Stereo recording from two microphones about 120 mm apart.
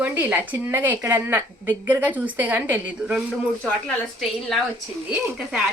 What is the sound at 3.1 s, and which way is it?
A woman's voice, 5° right (ahead or behind).